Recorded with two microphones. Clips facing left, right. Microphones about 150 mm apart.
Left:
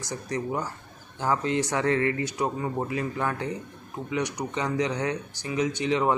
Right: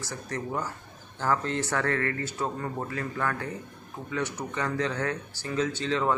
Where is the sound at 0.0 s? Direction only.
15° left (ahead or behind).